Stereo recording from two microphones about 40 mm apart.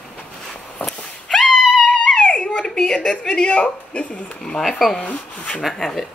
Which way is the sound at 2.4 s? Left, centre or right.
Centre.